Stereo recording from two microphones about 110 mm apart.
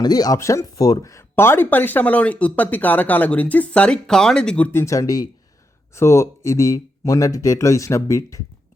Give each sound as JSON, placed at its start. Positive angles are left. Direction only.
{"t": 0.0, "sound": "speech", "side_deg": 35}
{"t": 4.7, "sound": "speech", "side_deg": 25}